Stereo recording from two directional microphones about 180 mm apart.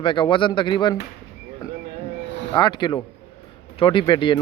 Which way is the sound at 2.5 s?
25° left (ahead or behind).